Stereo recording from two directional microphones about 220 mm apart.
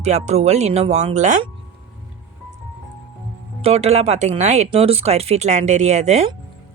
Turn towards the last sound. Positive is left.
turn(degrees=-30)  # may be behind; listen again after turning